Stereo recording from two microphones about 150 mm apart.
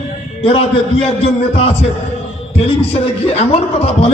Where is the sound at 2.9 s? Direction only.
45° left (ahead or behind).